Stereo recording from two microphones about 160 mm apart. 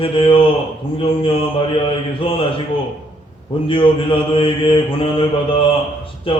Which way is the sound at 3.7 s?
35° left (ahead or behind).